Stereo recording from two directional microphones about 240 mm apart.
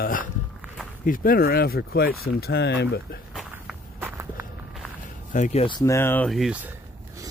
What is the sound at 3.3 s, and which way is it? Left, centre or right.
Walk, centre.